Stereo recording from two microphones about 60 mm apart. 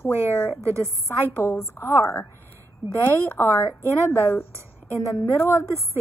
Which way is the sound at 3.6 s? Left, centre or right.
Right.